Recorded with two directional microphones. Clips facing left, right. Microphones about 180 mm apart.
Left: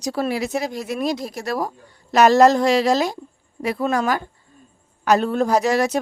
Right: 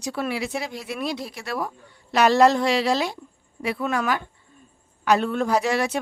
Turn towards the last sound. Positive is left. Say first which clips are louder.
# left 4 dB
turn(degrees=40)  # may be behind; listen again after turning